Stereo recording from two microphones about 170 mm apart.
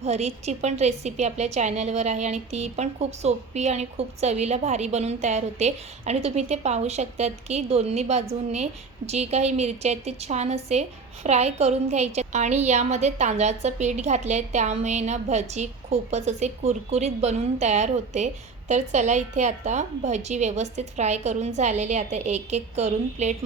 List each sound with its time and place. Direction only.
0.0 s a woman's voice: 40° right (ahead or behind)